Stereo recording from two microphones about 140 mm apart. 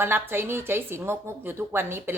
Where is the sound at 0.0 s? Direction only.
15° right (ahead or behind).